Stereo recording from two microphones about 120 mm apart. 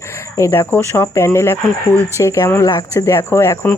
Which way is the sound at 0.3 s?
25° left (ahead or behind).